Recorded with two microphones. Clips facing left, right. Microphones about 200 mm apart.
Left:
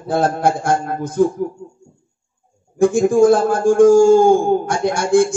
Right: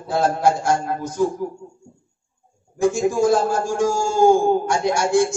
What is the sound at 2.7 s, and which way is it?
Music, 55° left (ahead or behind).